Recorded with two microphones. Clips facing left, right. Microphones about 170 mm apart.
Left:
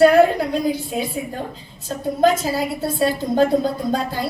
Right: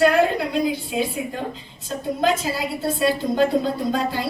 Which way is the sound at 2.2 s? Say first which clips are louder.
Left 5 dB; 40° left (ahead or behind).